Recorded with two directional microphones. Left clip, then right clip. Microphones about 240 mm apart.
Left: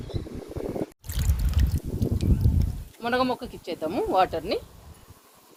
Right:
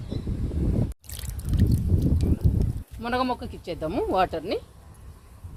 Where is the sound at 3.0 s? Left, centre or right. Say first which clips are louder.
Left 1 dB; right.